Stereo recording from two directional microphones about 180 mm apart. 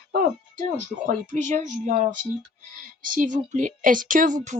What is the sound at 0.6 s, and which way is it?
A woman's voice, 45° right (ahead or behind).